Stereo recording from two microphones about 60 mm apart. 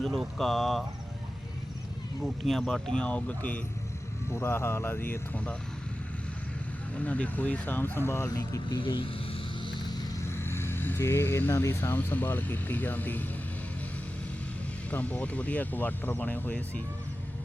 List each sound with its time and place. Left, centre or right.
0.0 s speech: centre
2.2 s speech: centre; by 3.6 s left
4.3 s speech: left
6.9 s speech: left
7.9 s speech: left
8.3 s speech: left
10.2 s speech: left
11.9 s speech: left
14.8 s speech: left